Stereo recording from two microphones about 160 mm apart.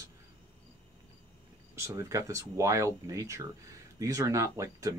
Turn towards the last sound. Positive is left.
turn(degrees=-20)  # may be behind; listen again after turning